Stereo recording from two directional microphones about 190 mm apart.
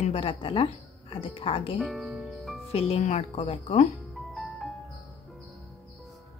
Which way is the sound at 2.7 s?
30° left (ahead or behind).